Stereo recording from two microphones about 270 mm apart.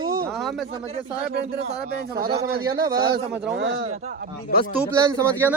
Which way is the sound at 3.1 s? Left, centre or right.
Right.